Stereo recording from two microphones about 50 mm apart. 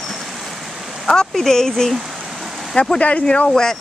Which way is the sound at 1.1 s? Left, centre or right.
Centre.